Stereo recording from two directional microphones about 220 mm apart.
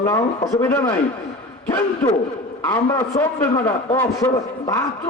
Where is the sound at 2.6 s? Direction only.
10° left (ahead or behind).